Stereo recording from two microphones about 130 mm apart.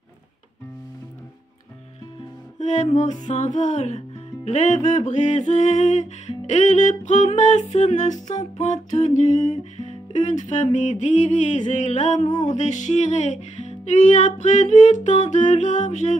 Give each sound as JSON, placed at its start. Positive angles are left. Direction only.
{"t": 2.6, "sound": "music", "side_deg": 65}